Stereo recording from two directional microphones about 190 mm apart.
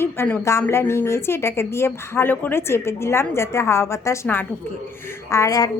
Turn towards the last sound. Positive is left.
turn(degrees=15)  # may be behind; listen again after turning